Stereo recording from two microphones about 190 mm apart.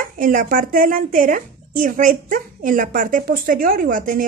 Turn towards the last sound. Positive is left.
turn(degrees=-45)  # may be behind; listen again after turning